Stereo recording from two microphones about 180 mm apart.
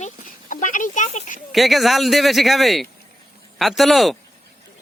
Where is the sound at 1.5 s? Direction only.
Centre (ahead or behind).